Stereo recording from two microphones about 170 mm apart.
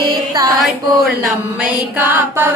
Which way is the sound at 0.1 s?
25° right (ahead or behind).